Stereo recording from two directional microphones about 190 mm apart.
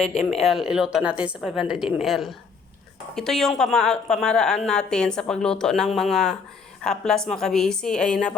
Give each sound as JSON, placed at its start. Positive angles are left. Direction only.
{"t": 0.1, "sound": "speech", "side_deg": 35}
{"t": 0.4, "sound": "a woman's voice", "side_deg": 0}